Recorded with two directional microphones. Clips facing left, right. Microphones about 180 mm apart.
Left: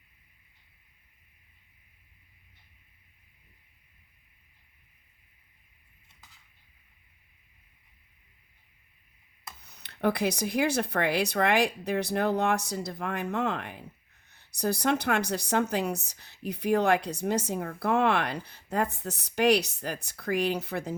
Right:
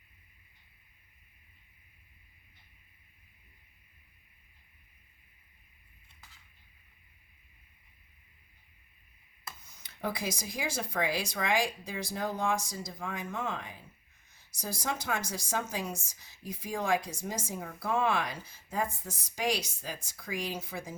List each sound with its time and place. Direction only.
9.6 s speech: 65° left (ahead or behind)